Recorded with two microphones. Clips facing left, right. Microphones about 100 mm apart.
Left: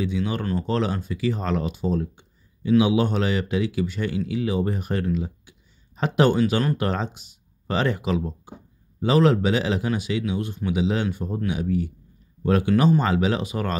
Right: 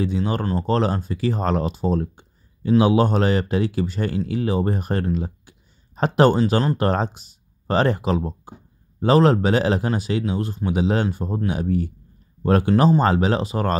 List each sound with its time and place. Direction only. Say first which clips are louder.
0.0 s speech: right 3 dB; 40° right (ahead or behind)
6.8 s speech: right 5 dB; 40° right (ahead or behind)